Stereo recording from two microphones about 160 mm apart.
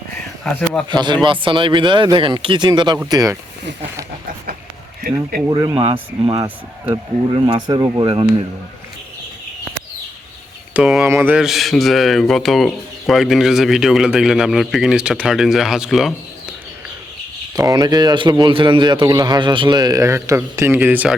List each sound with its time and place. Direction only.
0.4 s a man's voice: 5° left (ahead or behind)
0.9 s a man's voice: 30° right (ahead or behind)
5.5 s speech: 25° right (ahead or behind)
10.8 s a man's voice: 5° right (ahead or behind)
17.5 s a man's voice: 25° right (ahead or behind)